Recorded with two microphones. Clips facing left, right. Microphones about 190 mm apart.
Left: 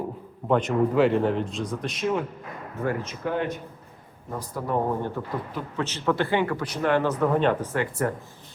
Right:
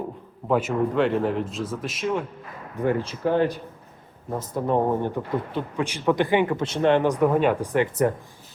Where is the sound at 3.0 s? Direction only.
30° right (ahead or behind).